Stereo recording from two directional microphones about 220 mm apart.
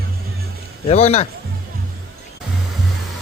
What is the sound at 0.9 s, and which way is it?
Speech, 30° left (ahead or behind).